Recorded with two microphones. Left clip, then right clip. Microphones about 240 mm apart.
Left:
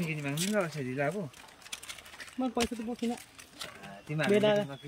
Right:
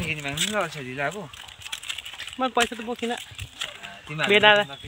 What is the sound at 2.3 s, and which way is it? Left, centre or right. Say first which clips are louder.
Speech: right 10 dB; centre.